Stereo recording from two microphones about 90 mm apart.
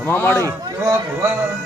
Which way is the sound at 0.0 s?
25° left (ahead or behind).